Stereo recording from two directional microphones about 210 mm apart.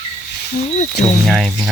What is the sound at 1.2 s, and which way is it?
Speech, centre (ahead or behind).